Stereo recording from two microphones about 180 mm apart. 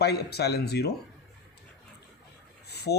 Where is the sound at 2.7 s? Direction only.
65° left (ahead or behind).